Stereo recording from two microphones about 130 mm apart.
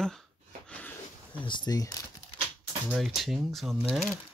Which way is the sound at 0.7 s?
10° left (ahead or behind).